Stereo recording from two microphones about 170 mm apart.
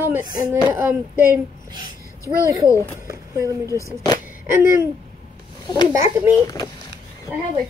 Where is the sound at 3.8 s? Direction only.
20° left (ahead or behind).